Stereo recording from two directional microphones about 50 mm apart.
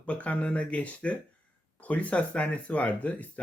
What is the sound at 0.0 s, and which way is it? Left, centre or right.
Speech, left.